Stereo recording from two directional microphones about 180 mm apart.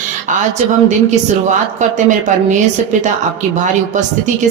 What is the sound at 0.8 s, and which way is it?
Speech, 45° right (ahead or behind).